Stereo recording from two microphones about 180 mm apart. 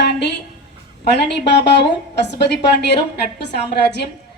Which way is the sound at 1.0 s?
70° left (ahead or behind).